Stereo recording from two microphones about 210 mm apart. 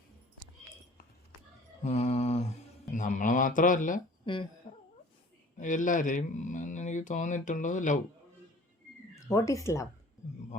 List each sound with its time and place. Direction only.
1.8 s mantra: 30° left (ahead or behind)
2.9 s speech: 35° left (ahead or behind)
4.3 s a sound: 25° left (ahead or behind)
5.5 s speech: 40° left (ahead or behind)
9.2 s speech: 15° left (ahead or behind)